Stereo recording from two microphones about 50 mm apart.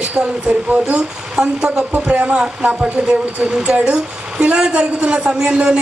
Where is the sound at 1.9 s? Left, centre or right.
Right.